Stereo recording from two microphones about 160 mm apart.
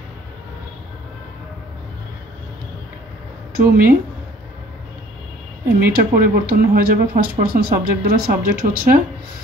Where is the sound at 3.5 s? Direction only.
65° right (ahead or behind).